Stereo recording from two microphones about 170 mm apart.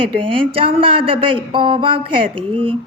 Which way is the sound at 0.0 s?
30° right (ahead or behind).